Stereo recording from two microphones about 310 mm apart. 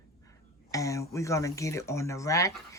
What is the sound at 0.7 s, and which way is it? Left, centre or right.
Speech, centre.